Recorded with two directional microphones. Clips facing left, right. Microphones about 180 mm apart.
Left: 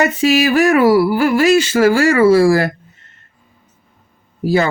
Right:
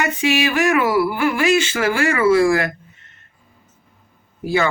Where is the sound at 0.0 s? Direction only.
35° left (ahead or behind).